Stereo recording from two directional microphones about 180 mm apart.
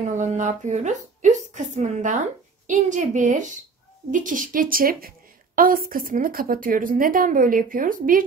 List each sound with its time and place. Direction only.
0.2 s a woman's voice: 40° right (ahead or behind)